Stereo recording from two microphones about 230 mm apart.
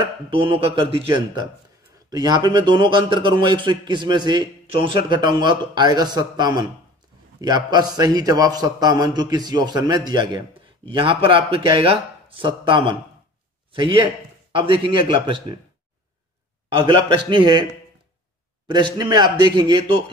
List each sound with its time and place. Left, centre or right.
0.0 s a man's voice: right
16.6 s a man's voice: right
18.7 s a man's voice: centre